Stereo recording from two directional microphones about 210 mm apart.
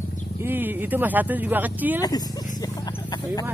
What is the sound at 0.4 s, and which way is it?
Speech, 10° right (ahead or behind).